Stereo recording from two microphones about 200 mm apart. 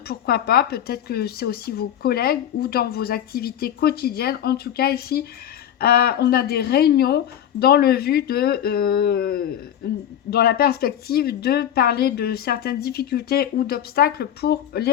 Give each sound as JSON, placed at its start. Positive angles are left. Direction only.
{"t": 0.1, "sound": "speech", "side_deg": 50}